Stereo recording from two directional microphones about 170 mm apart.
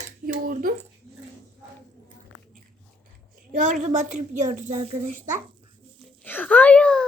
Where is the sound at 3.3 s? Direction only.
50° right (ahead or behind).